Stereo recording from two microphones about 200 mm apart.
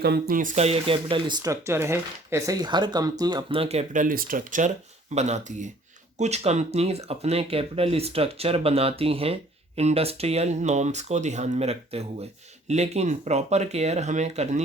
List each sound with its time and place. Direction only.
0.0 s speech: 50° right (ahead or behind)